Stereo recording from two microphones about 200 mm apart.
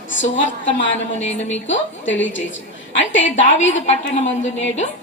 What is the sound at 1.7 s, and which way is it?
A woman's voice, 70° left (ahead or behind).